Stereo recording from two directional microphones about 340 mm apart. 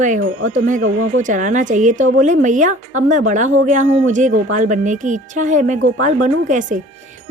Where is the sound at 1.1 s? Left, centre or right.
Right.